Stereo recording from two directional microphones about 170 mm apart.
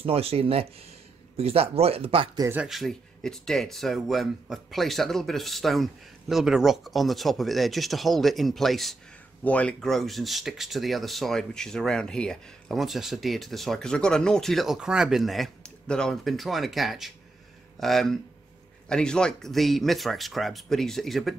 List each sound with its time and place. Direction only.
0.0 s speech: 35° right (ahead or behind)
2.4 s speech: 10° right (ahead or behind)